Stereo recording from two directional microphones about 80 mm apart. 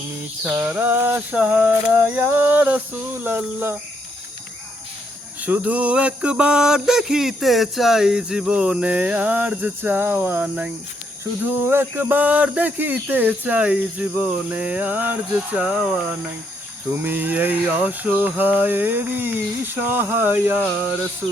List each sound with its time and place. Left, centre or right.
0.5 s speech: centre
5.4 s a sound: centre
11.4 s speech: right
16.9 s speech: right